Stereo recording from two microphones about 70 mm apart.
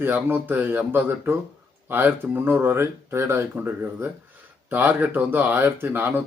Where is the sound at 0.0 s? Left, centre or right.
Right.